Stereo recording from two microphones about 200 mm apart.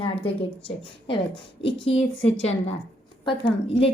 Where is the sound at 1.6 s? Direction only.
25° left (ahead or behind).